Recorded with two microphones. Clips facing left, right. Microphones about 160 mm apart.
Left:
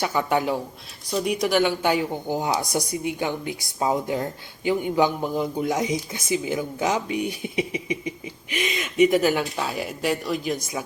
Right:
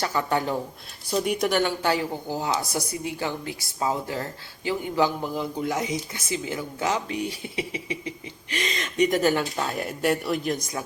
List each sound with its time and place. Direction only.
0.0 s a man's voice: 10° left (ahead or behind)
1.8 s a man's voice: 15° left (ahead or behind)